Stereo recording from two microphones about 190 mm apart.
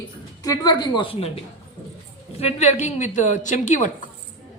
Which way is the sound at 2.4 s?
35° left (ahead or behind).